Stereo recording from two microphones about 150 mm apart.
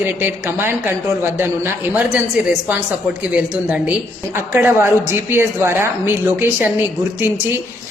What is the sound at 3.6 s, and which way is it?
A woman's voice, 10° right (ahead or behind).